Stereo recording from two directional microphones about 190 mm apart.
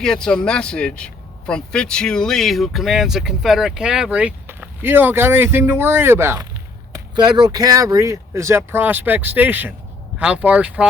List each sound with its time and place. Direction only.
0.0 s speech: 5° left (ahead or behind)